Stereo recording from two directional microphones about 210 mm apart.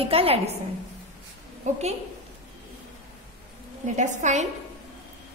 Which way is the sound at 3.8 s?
35° right (ahead or behind).